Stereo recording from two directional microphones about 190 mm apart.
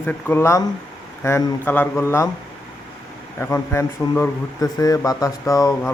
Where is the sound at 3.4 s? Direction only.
15° left (ahead or behind).